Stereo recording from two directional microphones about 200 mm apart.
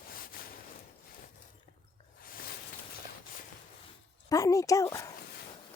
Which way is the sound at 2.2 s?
45° left (ahead or behind).